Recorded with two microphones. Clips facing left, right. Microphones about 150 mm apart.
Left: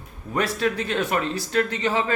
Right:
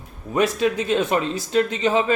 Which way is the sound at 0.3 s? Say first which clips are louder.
Right 4 dB; 15° right (ahead or behind).